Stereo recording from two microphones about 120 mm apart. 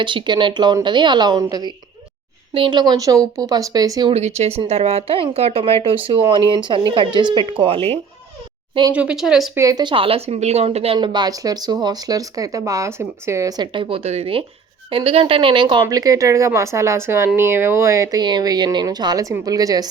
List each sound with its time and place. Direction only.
0.0 s speech: 40° right (ahead or behind)
2.5 s speech: 45° right (ahead or behind)
4.4 s a woman's voice: 60° right (ahead or behind)
6.1 s speech: 40° right (ahead or behind)
8.9 s speech: 10° right (ahead or behind)
9.6 s speech: 30° right (ahead or behind)
9.9 s a woman's voice: 50° right (ahead or behind)
10.9 s speech: 40° right (ahead or behind)
18.2 s speech: 35° right (ahead or behind)